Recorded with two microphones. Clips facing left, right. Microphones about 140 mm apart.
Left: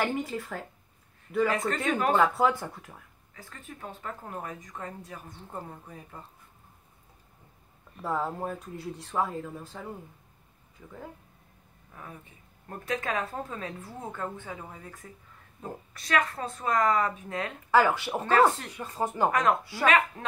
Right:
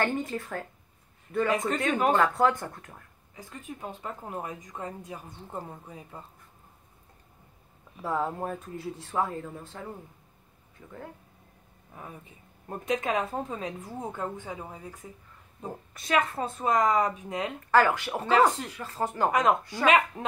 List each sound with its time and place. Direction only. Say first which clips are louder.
0.0 s speech: right 1 dB; 5° left (ahead or behind)
3.3 s speech: right 4 dB; 15° right (ahead or behind)
5.5 s a woman's voice: right 2 dB; 10° right (ahead or behind)
7.9 s speech: right 1 dB; centre (ahead or behind)
12.6 s a woman's voice: right 3 dB; 20° right (ahead or behind)
15.6 s speech: right 1 dB; 25° right (ahead or behind)
17.6 s speech: even; 10° left (ahead or behind)
18.2 s a woman's voice: even; 10° right (ahead or behind)
18.7 s speech: even; 15° left (ahead or behind)
19.3 s a woman's voice: right 1 dB; 20° right (ahead or behind)